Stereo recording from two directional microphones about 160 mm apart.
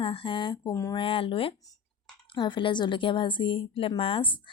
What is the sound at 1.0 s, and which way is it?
A woman's voice, 35° left (ahead or behind).